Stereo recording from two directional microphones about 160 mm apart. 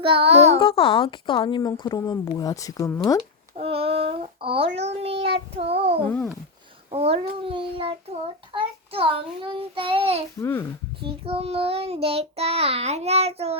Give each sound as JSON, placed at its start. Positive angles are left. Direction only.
{"t": 0.0, "sound": "child singing", "side_deg": -35}
{"t": 0.6, "sound": "speech", "side_deg": 35}
{"t": 3.5, "sound": "child singing", "side_deg": -40}
{"t": 10.4, "sound": "a child's voice", "side_deg": 15}
{"t": 11.0, "sound": "child singing", "side_deg": -35}